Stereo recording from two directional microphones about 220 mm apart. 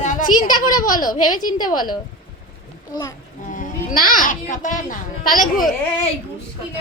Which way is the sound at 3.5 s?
35° left (ahead or behind).